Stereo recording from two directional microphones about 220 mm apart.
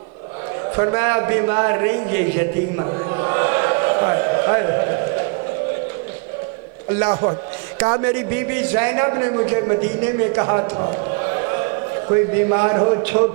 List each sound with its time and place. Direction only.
0.8 s a man's voice: 15° right (ahead or behind)
7.0 s a man's voice: 25° right (ahead or behind)